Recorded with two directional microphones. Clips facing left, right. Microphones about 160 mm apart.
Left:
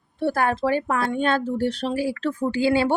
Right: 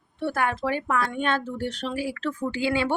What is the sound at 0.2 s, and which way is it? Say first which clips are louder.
Speech: left 4 dB; 35° left (ahead or behind).